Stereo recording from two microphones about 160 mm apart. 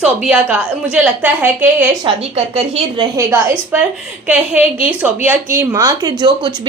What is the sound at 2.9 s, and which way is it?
A woman's voice, 20° right (ahead or behind).